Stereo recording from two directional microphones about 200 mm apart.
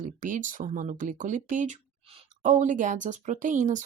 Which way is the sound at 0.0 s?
40° right (ahead or behind).